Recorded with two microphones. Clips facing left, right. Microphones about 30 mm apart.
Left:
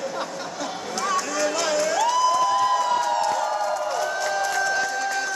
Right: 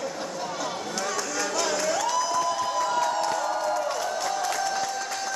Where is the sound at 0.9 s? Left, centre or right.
Centre.